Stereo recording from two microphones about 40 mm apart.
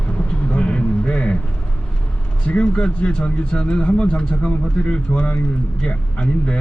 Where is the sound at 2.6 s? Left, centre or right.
Left.